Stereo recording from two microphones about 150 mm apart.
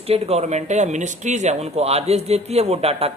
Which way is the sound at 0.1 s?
45° right (ahead or behind).